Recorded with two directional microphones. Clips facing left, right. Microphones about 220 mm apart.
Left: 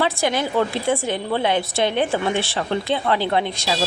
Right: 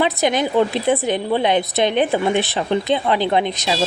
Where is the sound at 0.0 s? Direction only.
20° right (ahead or behind).